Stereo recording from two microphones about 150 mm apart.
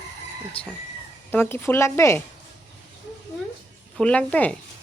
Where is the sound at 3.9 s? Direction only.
10° left (ahead or behind).